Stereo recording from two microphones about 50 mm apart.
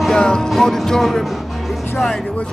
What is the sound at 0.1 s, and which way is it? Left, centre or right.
Music, centre.